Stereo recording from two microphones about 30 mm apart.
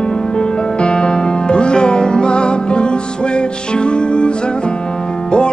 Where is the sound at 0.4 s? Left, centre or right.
Left.